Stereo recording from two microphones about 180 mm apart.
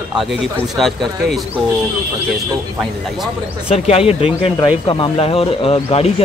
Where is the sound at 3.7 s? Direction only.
35° left (ahead or behind).